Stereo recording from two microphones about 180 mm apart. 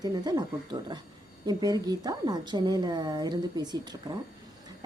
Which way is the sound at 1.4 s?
20° right (ahead or behind).